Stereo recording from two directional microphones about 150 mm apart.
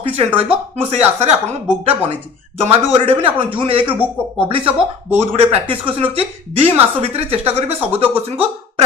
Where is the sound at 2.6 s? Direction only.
40° right (ahead or behind).